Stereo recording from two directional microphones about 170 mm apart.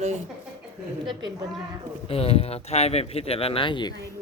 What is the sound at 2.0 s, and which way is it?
Speech, 35° left (ahead or behind).